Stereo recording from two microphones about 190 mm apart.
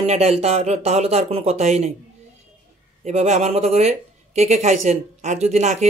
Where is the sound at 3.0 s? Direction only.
35° right (ahead or behind).